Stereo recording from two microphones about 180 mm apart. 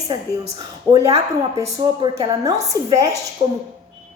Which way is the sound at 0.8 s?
15° right (ahead or behind).